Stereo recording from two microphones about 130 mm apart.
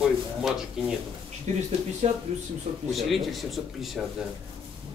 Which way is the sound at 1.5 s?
65° right (ahead or behind).